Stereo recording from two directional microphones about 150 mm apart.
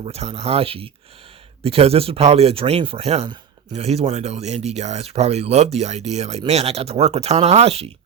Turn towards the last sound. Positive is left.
turn(degrees=-40)  # may be behind; listen again after turning